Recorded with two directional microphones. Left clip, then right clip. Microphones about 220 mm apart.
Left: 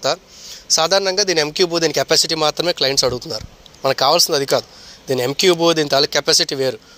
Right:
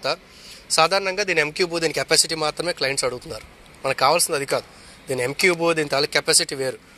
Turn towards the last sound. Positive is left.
turn(degrees=40)  # may be behind; listen again after turning